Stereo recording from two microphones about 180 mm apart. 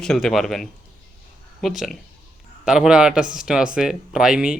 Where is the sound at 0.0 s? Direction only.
5° left (ahead or behind).